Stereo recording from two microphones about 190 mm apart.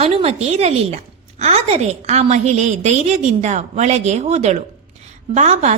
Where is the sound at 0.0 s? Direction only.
35° right (ahead or behind).